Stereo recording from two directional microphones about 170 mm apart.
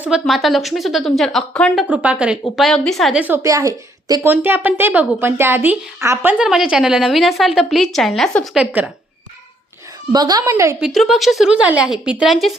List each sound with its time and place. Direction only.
0.0 s a woman's voice: 5° right (ahead or behind)
1.9 s a woman's voice: 10° right (ahead or behind)
8.5 s a woman's voice: 10° right (ahead or behind)
10.1 s a woman's voice: 20° right (ahead or behind)
10.8 s a woman's voice: centre (ahead or behind)